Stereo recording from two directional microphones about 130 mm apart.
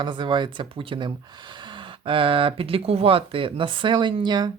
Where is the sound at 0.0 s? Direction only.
35° right (ahead or behind).